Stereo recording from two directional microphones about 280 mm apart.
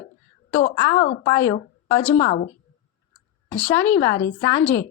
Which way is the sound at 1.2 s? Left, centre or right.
Centre.